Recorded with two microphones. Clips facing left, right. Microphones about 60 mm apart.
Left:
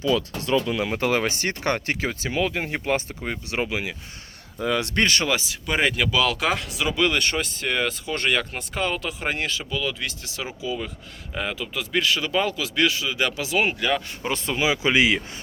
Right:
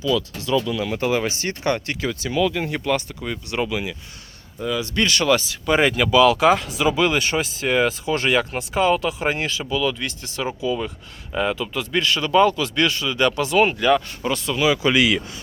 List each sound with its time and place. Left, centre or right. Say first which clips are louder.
0.0 s speech: right 1 dB; left
4.6 s speech: left 1 dB; left
4.9 s speech: right 3 dB; left
5.6 s speech: right 4 dB; centre
14.3 s speech: right 3 dB; left